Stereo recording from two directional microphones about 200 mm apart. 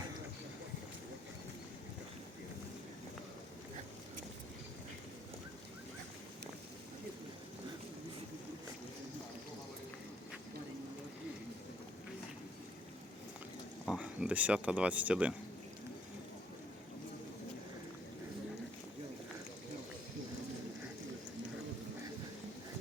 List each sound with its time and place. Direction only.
13.8 s speech: 5° right (ahead or behind)